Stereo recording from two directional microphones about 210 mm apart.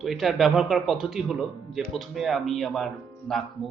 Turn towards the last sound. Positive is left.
turn(degrees=0)  # may be behind; listen again after turning